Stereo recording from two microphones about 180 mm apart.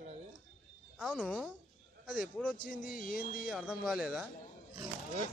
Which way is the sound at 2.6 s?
50° left (ahead or behind).